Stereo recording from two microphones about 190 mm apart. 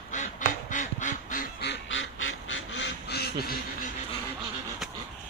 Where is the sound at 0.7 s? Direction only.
40° left (ahead or behind).